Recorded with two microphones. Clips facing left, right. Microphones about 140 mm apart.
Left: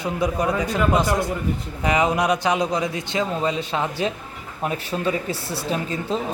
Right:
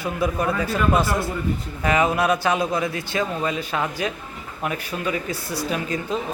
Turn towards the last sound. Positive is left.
turn(degrees=30)  # may be behind; listen again after turning